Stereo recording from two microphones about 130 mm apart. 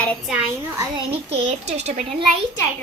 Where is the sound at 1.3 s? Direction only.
55° right (ahead or behind).